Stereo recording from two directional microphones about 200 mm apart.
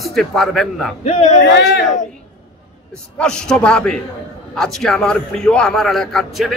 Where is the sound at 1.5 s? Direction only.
60° left (ahead or behind).